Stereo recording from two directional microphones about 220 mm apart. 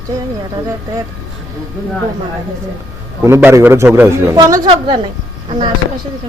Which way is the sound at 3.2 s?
10° right (ahead or behind).